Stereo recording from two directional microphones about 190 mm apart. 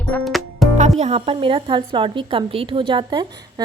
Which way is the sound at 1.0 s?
30° right (ahead or behind).